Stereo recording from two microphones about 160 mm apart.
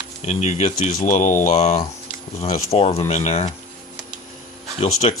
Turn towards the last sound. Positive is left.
turn(degrees=40)  # may be behind; listen again after turning